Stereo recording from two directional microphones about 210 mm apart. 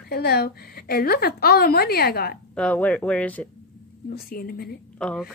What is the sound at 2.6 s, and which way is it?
Speech, 5° left (ahead or behind).